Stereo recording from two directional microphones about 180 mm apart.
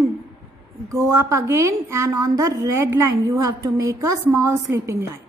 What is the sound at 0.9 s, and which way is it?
A woman's voice, 15° right (ahead or behind).